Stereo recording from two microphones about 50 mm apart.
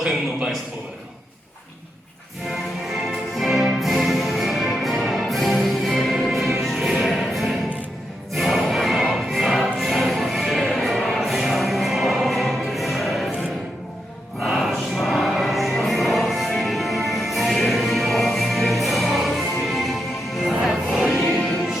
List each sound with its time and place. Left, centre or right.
3.3 s music: centre
14.4 s music: centre
21.0 s music: centre